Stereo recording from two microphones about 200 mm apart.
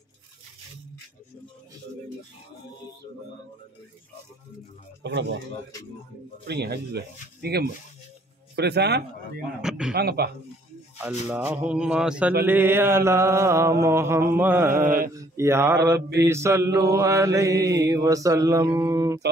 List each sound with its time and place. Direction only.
5.0 s speech: 60° right (ahead or behind)
6.4 s speech: 55° right (ahead or behind)
9.6 s a man's voice: 5° right (ahead or behind)
9.9 s speech: 50° right (ahead or behind)
11.0 s mantra: 10° right (ahead or behind)
14.9 s speech: 45° right (ahead or behind)
15.1 s mantra: 15° right (ahead or behind)
15.9 s speech: 55° right (ahead or behind)
16.3 s mantra: 15° right (ahead or behind)